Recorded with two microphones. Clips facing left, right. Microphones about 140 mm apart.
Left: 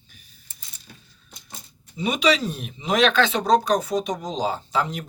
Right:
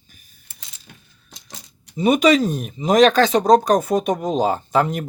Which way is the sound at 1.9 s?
45° right (ahead or behind).